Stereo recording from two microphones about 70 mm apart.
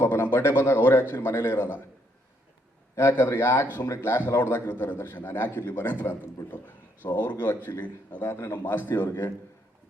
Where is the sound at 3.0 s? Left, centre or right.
Left.